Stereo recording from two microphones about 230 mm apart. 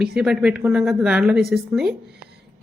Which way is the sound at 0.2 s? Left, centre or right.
Centre.